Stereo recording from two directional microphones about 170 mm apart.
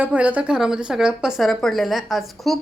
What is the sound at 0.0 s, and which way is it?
A woman's voice, 10° right (ahead or behind).